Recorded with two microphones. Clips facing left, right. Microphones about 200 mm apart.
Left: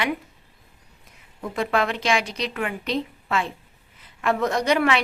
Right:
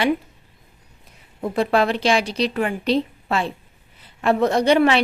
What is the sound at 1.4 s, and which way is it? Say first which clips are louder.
A woman's voice: right 5 dB; 35° right (ahead or behind).